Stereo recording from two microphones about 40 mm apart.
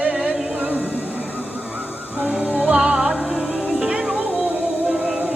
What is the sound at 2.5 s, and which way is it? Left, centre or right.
Music, right.